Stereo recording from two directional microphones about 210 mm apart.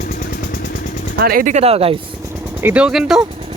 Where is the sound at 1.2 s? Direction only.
45° right (ahead or behind); by 2.0 s 30° right (ahead or behind).